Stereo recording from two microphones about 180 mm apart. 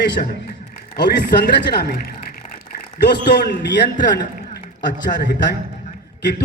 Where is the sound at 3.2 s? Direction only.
65° left (ahead or behind).